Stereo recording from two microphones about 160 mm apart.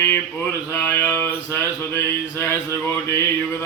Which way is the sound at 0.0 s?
15° left (ahead or behind).